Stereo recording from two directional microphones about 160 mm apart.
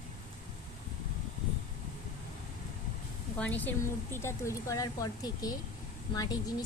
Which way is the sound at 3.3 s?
10° left (ahead or behind).